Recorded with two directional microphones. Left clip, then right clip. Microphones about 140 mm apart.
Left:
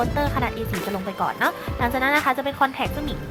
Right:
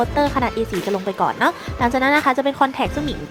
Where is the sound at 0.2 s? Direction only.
35° right (ahead or behind).